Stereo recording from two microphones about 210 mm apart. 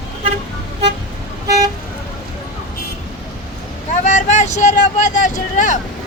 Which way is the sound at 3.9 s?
35° left (ahead or behind).